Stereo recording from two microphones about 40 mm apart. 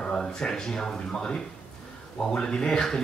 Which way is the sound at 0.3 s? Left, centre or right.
Centre.